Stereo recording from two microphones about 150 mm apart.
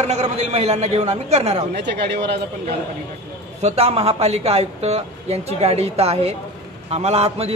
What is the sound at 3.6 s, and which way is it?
A man's voice, 45° right (ahead or behind).